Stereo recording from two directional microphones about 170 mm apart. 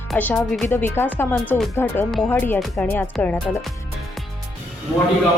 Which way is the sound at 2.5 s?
Centre (ahead or behind).